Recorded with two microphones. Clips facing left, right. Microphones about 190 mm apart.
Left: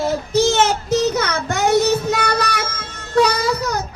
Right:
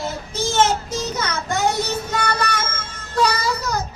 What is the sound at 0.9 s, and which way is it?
Child singing, 65° left (ahead or behind).